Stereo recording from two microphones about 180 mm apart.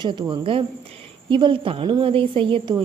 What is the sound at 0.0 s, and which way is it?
A woman's voice, 25° right (ahead or behind).